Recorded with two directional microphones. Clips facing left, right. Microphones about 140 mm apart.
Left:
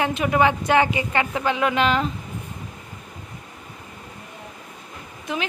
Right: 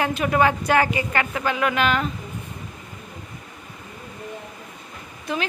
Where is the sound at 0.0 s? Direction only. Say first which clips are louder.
Even; 15° left (ahead or behind).